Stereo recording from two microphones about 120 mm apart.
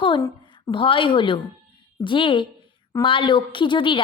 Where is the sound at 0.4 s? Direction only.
40° left (ahead or behind).